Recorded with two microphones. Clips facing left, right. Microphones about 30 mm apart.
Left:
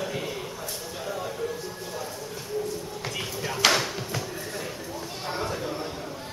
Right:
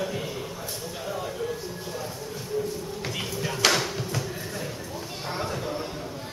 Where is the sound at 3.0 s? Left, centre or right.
Centre.